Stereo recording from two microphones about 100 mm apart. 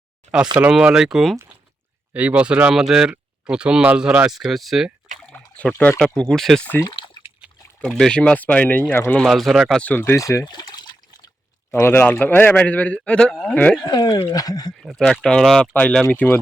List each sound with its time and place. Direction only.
0.5 s speech: 10° right (ahead or behind)
2.1 s speech: 15° right (ahead or behind)
4.4 s speech: centre (ahead or behind)
5.3 s a sound: 15° left (ahead or behind)
6.0 s speech: 5° left (ahead or behind)
7.8 s a man's voice: 5° left (ahead or behind)
9.2 s speech: centre (ahead or behind)
9.8 s speech: 20° left (ahead or behind)
10.2 s speech: 35° left (ahead or behind)
10.4 s water: 45° left (ahead or behind)
11.7 s a man's voice: 25° left (ahead or behind)
13.8 s speech: 40° left (ahead or behind)
14.8 s a man's voice: 5° left (ahead or behind); by 16.4 s 20° left (ahead or behind)